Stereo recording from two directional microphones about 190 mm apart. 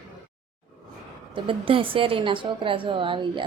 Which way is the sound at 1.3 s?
30° right (ahead or behind).